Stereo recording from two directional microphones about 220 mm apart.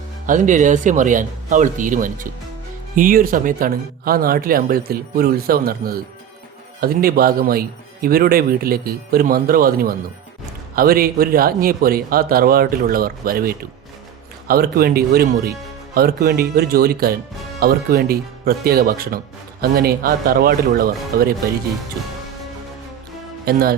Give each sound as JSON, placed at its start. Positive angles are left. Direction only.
{"t": 0.3, "sound": "a man's voice", "side_deg": -35}
{"t": 23.5, "sound": "a man's voice", "side_deg": -45}